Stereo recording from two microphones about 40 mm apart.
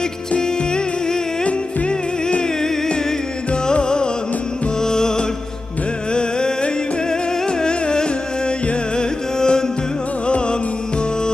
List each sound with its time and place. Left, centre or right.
1.4 s music: left
3.6 s music: left